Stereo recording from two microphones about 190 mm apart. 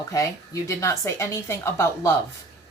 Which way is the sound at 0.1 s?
15° left (ahead or behind).